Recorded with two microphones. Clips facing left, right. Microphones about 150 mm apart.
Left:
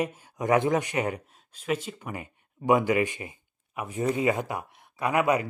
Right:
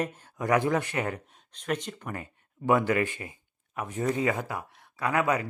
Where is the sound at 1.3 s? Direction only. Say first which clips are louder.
Left 2 dB; 5° left (ahead or behind).